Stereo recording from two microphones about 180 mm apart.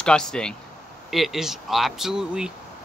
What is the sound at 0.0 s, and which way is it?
Speech, 5° left (ahead or behind).